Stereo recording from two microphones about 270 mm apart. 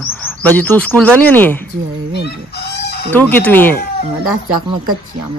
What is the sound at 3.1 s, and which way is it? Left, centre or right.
Speech, centre.